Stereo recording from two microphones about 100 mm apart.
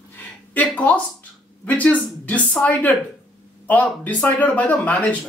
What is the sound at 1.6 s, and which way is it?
Speech, 15° left (ahead or behind).